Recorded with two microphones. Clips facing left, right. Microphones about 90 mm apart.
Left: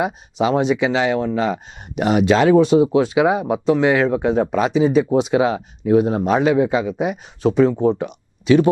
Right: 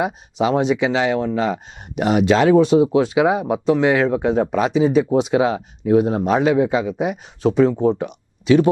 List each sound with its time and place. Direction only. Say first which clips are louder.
0.0 s speech: even; 15° left (ahead or behind)